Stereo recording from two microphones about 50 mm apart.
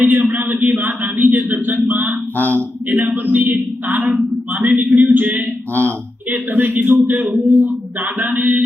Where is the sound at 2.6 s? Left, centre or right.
Right.